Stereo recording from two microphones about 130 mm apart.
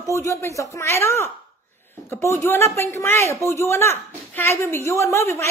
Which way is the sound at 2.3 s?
20° left (ahead or behind).